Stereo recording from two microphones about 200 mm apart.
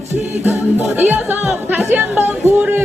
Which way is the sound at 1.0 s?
10° right (ahead or behind).